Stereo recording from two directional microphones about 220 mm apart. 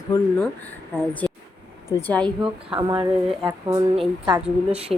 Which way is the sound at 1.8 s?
10° left (ahead or behind).